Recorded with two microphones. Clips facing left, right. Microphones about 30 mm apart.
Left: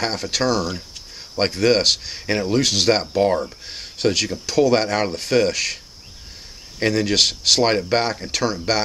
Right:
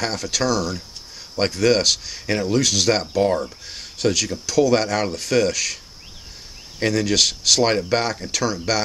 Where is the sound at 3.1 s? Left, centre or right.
Centre.